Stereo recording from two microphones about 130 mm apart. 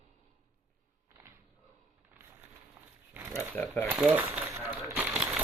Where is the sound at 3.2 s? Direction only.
15° right (ahead or behind).